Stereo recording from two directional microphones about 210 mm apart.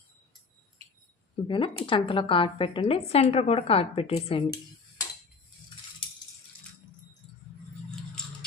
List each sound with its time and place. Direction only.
1.5 s speech: 25° left (ahead or behind)
7.9 s scissors: 5° left (ahead or behind)